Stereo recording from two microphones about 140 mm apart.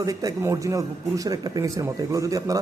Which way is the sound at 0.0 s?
25° right (ahead or behind).